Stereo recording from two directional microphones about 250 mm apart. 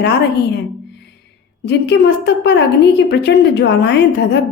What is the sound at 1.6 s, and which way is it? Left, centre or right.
A woman's voice, left.